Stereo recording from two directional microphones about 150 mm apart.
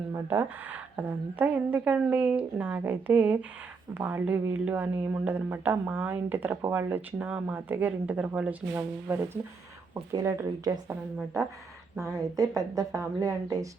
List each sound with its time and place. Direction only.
0.1 s a woman's voice: 15° right (ahead or behind)
11.9 s speech: 20° right (ahead or behind)